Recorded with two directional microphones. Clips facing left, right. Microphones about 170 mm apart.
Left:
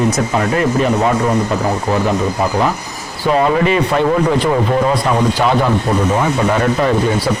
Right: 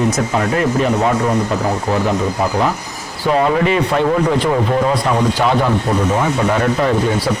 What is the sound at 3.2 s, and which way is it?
A man's voice, 15° left (ahead or behind).